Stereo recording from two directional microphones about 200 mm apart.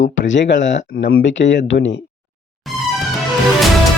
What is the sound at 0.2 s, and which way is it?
Speech, 65° left (ahead or behind).